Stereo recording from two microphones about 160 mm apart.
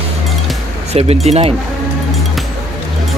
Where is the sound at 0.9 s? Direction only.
40° right (ahead or behind).